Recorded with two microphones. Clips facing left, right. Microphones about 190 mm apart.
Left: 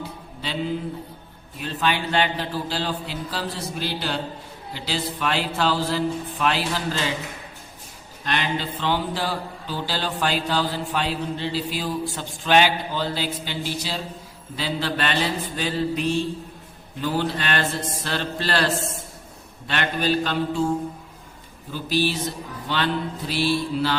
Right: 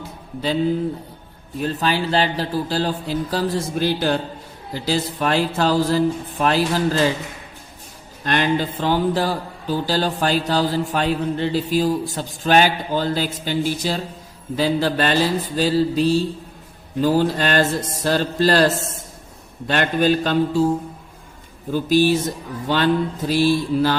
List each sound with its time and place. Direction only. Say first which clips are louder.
1.5 s speech: right 4 dB; 40° right (ahead or behind)
8.2 s speech: right 6 dB; 45° right (ahead or behind)
21.7 s speech: right 8 dB; 45° right (ahead or behind)